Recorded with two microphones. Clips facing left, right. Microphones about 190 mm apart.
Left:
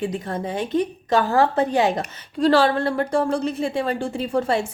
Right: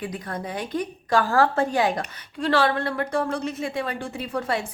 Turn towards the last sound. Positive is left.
turn(degrees=25)  # may be behind; listen again after turning